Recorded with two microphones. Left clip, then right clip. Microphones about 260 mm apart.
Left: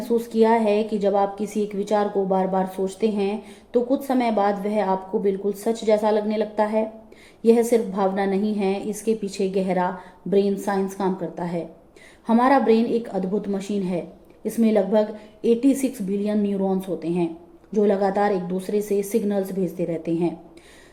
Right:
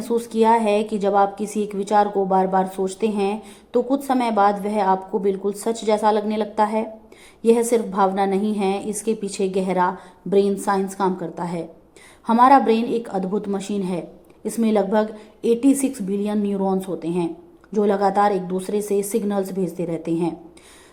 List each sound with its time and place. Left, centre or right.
0.2 s speech: right